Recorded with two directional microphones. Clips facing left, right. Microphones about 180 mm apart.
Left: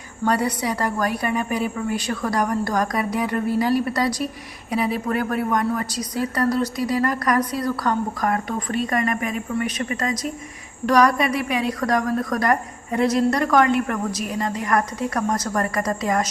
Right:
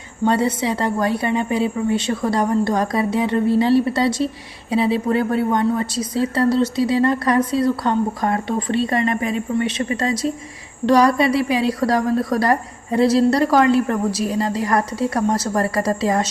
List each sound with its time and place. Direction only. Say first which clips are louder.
0.3 s a woman's voice: right 3 dB; 25° right (ahead or behind)